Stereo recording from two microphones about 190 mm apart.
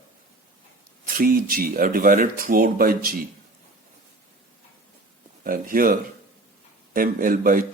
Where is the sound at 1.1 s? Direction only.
50° right (ahead or behind).